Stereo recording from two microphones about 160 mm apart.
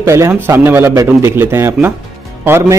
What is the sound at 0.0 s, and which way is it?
A man's voice, 20° right (ahead or behind).